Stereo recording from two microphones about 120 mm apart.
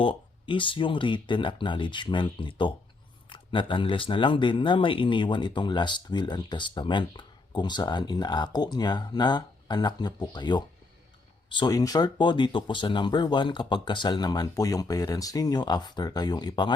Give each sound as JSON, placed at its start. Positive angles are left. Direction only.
{"t": 0.0, "sound": "speech", "side_deg": 45}
{"t": 11.7, "sound": "speech", "side_deg": 30}